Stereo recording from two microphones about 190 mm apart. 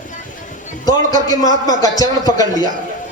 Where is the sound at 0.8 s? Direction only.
20° left (ahead or behind).